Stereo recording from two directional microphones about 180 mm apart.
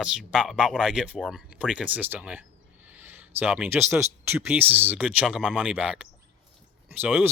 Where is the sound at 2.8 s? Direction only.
10° right (ahead or behind).